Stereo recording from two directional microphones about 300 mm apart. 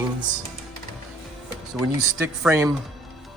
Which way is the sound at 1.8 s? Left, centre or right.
Centre.